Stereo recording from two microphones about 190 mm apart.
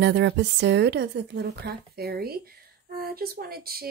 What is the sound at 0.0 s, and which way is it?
Speech, 65° right (ahead or behind).